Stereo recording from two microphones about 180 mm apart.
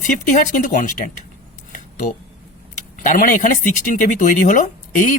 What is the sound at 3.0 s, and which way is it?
Speech, 45° left (ahead or behind).